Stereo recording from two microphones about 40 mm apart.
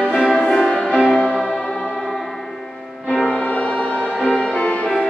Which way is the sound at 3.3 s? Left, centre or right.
Left.